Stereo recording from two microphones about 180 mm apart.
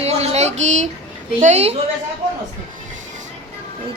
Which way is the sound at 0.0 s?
35° right (ahead or behind).